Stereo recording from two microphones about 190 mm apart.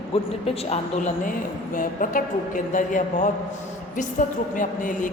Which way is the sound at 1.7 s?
45° left (ahead or behind).